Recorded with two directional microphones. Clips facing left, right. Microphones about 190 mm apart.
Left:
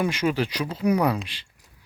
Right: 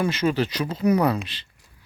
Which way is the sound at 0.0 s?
15° left (ahead or behind).